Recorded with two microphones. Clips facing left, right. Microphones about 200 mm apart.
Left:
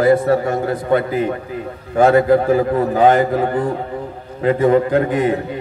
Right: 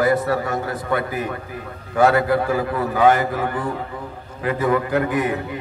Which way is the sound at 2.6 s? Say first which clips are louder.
Left 6 dB; 40° left (ahead or behind).